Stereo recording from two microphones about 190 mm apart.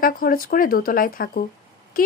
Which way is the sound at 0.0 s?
50° left (ahead or behind).